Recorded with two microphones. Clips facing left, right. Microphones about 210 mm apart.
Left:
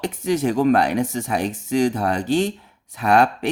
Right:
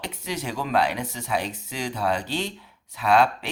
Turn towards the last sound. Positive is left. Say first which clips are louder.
# left 3 dB
turn(degrees=50)  # may be behind; listen again after turning